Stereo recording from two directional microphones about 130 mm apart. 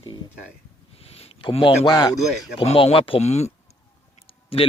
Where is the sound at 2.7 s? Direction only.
50° left (ahead or behind).